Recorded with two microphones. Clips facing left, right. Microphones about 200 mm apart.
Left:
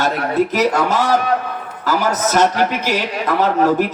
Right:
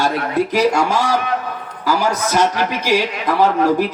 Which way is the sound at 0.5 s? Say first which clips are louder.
Right 1 dB; 10° right (ahead or behind).